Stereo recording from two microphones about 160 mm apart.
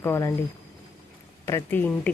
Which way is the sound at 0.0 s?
15° left (ahead or behind).